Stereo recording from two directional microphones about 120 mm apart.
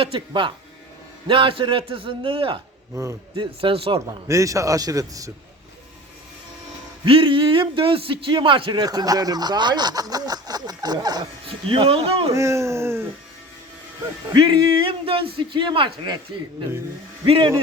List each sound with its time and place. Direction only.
0.0 s speech: 45° right (ahead or behind)
2.9 s a man's voice: 25° right (ahead or behind)
3.3 s speech: 45° right (ahead or behind)
4.3 s a man's voice: 25° right (ahead or behind)
7.0 s speech: 45° right (ahead or behind)
11.4 s speech: 50° right (ahead or behind)
12.3 s a man's voice: 25° right (ahead or behind)
14.3 s speech: 40° right (ahead or behind)
17.2 s speech: 50° right (ahead or behind)